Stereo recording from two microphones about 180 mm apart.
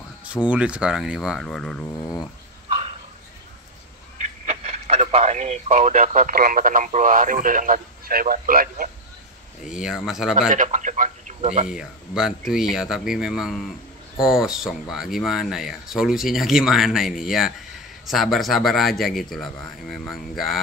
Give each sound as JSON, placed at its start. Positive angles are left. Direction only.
{"t": 0.2, "sound": "speech", "side_deg": -5}
{"t": 2.0, "sound": "speech", "side_deg": 20}
{"t": 4.5, "sound": "speech", "side_deg": -35}
{"t": 9.7, "sound": "speech", "side_deg": -5}
{"t": 10.5, "sound": "speech", "side_deg": -45}
{"t": 11.6, "sound": "speech", "side_deg": -5}